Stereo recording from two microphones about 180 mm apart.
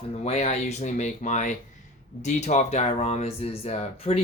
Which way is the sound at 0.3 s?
35° left (ahead or behind).